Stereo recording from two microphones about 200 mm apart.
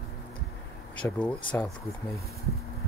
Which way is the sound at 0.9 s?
5° left (ahead or behind).